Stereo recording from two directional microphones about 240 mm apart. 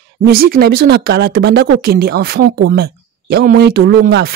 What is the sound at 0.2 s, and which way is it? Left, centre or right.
Speech, right.